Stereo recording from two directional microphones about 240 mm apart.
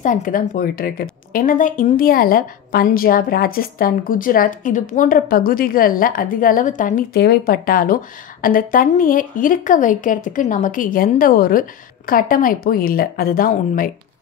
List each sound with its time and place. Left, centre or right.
0.0 s speech: left